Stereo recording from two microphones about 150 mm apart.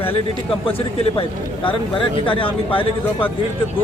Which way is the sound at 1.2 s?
35° left (ahead or behind).